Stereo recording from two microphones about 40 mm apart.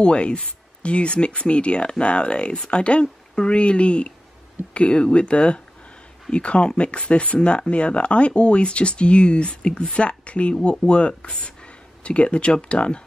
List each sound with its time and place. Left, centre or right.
0.0 s speech: left